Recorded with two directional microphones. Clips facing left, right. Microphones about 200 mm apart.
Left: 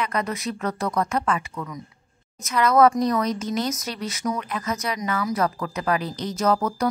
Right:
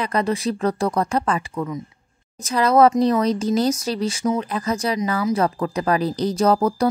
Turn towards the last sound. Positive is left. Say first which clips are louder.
# right 4 dB
turn(degrees=-30)  # may be behind; listen again after turning